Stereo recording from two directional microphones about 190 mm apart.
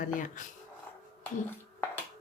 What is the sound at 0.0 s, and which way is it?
Speech, 45° left (ahead or behind).